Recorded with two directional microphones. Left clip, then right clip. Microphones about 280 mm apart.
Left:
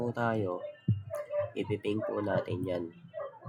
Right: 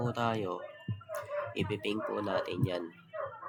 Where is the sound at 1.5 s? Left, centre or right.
Centre.